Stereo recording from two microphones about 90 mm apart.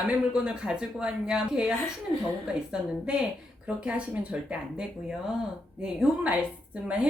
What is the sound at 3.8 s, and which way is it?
A woman's voice, 15° right (ahead or behind).